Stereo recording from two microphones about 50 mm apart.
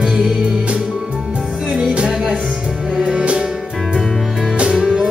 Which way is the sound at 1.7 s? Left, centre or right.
Centre.